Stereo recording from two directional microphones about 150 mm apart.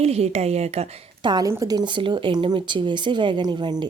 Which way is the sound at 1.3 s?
25° right (ahead or behind).